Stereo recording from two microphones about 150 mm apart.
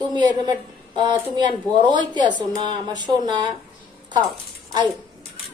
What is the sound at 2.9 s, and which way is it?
Speech, 25° right (ahead or behind).